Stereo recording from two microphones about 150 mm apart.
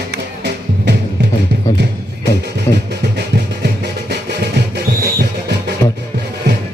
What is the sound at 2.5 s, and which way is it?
Music, 90° right.